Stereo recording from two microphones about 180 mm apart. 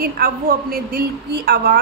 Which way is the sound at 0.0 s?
55° right (ahead or behind).